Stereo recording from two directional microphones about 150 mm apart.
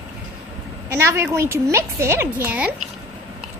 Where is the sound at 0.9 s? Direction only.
15° right (ahead or behind).